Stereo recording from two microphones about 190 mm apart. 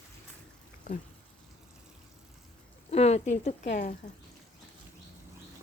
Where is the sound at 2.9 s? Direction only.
35° left (ahead or behind).